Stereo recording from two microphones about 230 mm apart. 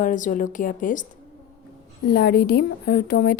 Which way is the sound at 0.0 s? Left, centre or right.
Left.